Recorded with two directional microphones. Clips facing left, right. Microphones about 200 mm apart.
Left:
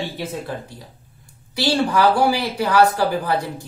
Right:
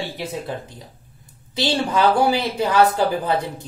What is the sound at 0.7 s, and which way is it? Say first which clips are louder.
Speech: left 1 dB; 20° right (ahead or behind).